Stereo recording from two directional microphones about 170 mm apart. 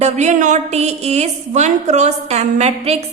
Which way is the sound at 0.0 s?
40° right (ahead or behind).